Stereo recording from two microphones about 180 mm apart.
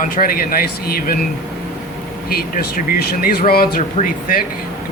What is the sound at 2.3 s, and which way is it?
Speech, 55° left (ahead or behind).